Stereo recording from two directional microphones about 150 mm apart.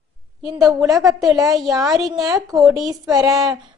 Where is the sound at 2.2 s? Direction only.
25° right (ahead or behind).